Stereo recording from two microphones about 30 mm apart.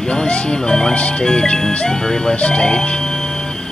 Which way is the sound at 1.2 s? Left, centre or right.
Left.